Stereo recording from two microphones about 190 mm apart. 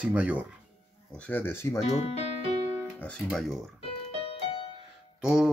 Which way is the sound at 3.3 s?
Centre (ahead or behind).